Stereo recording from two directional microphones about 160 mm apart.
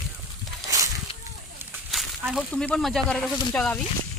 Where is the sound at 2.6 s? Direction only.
5° left (ahead or behind).